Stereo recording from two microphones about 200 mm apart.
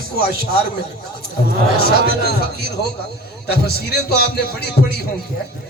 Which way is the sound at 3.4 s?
50° left (ahead or behind).